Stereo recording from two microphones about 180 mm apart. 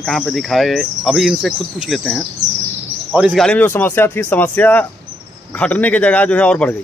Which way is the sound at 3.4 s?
10° left (ahead or behind).